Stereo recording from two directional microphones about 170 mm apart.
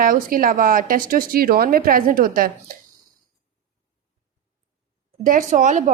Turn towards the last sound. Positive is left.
turn(degrees=-45)  # may be behind; listen again after turning